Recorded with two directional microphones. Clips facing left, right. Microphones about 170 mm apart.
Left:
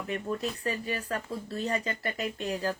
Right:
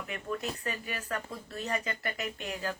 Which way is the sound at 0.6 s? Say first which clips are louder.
Left 5 dB; 35° left (ahead or behind).